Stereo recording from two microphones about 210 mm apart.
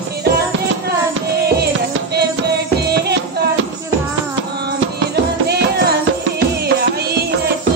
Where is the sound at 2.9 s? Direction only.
50° right (ahead or behind).